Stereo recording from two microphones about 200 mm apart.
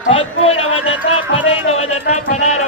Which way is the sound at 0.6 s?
90° left.